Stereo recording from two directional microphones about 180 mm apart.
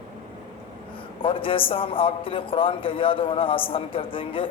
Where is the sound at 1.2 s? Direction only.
30° left (ahead or behind).